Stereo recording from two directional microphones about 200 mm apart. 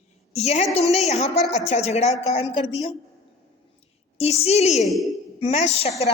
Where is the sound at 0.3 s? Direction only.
35° left (ahead or behind).